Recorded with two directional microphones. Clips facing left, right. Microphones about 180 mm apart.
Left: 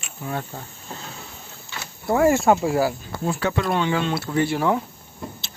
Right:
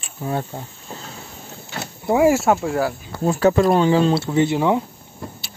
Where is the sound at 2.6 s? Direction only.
5° left (ahead or behind).